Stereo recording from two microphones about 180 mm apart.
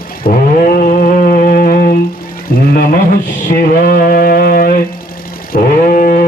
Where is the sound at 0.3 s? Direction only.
55° left (ahead or behind).